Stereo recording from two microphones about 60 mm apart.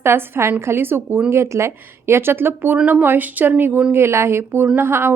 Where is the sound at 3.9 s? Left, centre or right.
Right.